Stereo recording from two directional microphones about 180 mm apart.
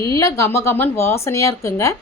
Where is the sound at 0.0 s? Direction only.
15° left (ahead or behind).